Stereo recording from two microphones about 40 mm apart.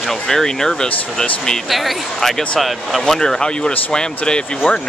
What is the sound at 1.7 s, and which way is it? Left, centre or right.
Speech, centre.